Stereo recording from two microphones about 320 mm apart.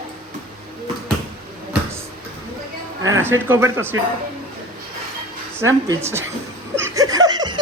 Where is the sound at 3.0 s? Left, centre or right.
Right.